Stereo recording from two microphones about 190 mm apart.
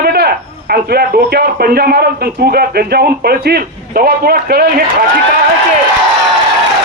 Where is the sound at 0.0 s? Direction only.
55° right (ahead or behind).